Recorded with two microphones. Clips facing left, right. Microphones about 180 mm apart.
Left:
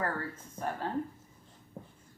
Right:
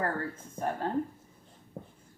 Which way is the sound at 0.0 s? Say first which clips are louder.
Right 2 dB; 40° right (ahead or behind).